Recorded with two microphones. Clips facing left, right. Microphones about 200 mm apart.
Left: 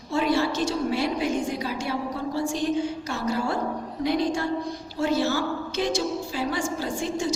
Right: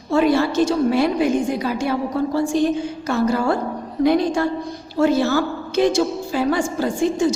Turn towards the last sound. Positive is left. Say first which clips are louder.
# right 9 dB
turn(degrees=-55)  # may be behind; listen again after turning